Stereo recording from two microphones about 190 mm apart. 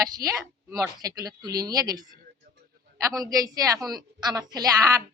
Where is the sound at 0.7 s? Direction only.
20° right (ahead or behind).